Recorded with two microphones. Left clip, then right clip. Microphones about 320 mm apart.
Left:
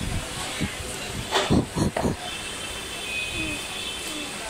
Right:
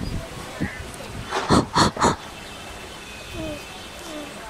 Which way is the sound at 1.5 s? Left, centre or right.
Right.